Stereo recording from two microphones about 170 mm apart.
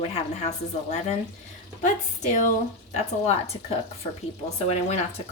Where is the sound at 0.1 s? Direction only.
40° left (ahead or behind).